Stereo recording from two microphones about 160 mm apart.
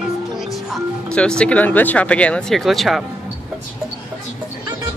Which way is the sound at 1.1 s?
5° left (ahead or behind).